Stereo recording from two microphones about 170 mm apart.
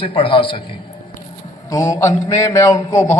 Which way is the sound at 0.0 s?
30° left (ahead or behind).